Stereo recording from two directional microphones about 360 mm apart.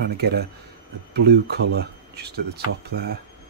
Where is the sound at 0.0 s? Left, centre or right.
Right.